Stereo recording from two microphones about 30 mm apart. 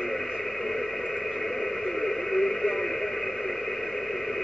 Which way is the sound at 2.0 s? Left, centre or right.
Centre.